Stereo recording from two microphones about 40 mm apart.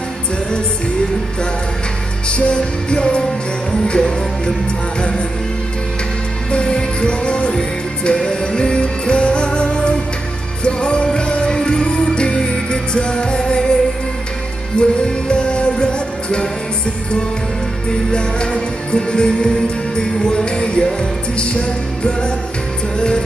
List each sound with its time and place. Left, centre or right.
2.2 s music: left
6.5 s music: left
14.8 s music: left
18.1 s music: left
22.9 s music: left